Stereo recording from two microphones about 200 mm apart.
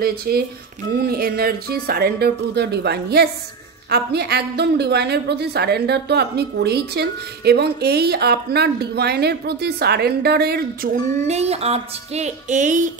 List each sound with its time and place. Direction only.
0.0 s a woman's voice: 50° right (ahead or behind)